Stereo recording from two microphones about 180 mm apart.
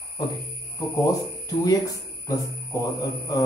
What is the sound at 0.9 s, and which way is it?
Speech, 20° left (ahead or behind).